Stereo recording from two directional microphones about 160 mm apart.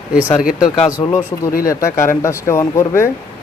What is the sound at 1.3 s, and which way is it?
Speech, 25° left (ahead or behind).